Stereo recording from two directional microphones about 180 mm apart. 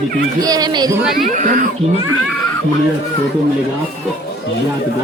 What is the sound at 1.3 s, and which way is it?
Speech, 45° right (ahead or behind).